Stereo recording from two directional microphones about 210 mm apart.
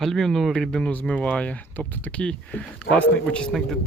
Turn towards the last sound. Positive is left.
turn(degrees=0)  # may be behind; listen again after turning